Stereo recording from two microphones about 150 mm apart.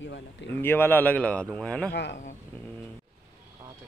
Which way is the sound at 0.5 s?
15° left (ahead or behind).